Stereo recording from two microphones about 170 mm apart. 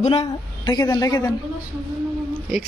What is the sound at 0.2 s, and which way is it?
A man's voice, 20° left (ahead or behind).